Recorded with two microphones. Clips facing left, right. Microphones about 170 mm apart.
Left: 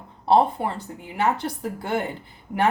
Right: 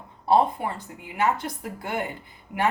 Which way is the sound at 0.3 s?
30° left (ahead or behind).